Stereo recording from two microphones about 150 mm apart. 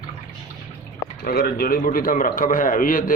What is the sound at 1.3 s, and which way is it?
A man's voice, 90° left.